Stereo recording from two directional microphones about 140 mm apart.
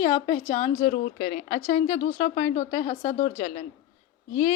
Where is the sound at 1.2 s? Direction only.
50° left (ahead or behind).